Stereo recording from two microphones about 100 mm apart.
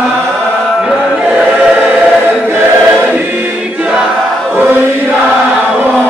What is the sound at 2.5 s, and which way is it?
Choir, 20° right (ahead or behind).